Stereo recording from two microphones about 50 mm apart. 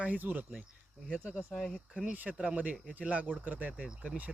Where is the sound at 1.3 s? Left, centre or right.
Centre.